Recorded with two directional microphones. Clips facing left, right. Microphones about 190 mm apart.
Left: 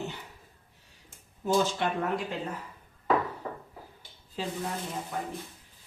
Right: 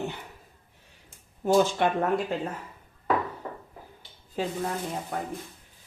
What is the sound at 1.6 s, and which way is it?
Speech, 50° right (ahead or behind).